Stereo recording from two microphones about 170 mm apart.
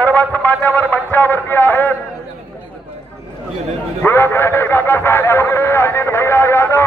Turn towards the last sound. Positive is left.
turn(degrees=15)  # may be behind; listen again after turning